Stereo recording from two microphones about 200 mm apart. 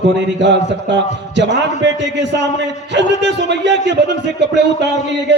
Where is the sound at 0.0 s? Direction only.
60° right (ahead or behind).